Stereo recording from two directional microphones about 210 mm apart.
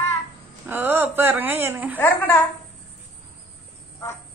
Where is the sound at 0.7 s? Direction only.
10° right (ahead or behind).